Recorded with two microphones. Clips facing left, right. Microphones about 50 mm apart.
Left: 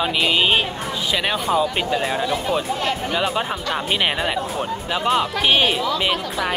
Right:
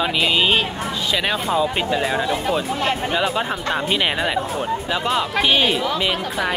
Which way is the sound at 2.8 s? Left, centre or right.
Right.